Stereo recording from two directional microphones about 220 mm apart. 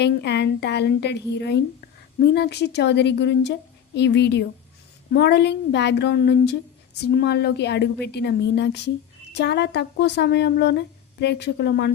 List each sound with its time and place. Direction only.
0.0 s speech: 50° left (ahead or behind)